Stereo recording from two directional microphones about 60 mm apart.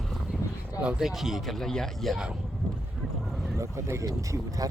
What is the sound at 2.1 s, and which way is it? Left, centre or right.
Speech, centre.